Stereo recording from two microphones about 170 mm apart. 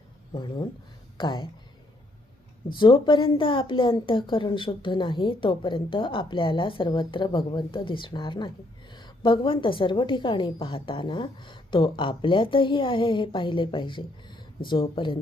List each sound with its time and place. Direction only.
0.3 s a woman's voice: 25° left (ahead or behind)
2.7 s a woman's voice: 30° left (ahead or behind)